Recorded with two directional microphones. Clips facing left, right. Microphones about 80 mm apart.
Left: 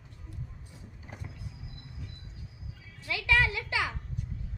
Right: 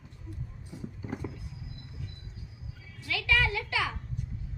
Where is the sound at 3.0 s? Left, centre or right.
Left.